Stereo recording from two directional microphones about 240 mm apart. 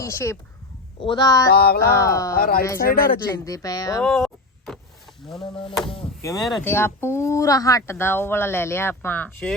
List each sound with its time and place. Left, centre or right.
0.0 s speech: centre
1.5 s music: left
2.0 s speech: centre
2.3 s music: left
3.2 s speech: centre
4.0 s a sound: centre
5.4 s a sound: left
6.2 s speech: centre